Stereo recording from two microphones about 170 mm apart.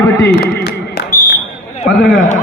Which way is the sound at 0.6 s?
75° left (ahead or behind).